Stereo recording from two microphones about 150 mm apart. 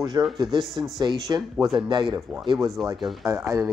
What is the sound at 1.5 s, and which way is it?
Speech, centre (ahead or behind).